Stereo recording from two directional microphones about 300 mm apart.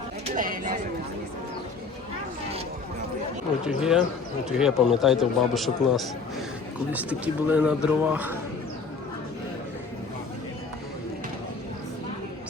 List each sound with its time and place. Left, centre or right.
0.3 s speech: right
3.8 s a man's voice: centre